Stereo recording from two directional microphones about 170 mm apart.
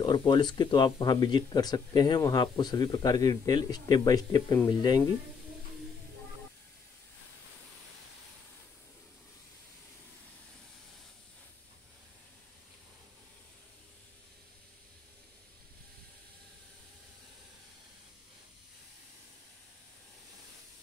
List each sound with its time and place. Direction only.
0.0 s speech: 25° left (ahead or behind)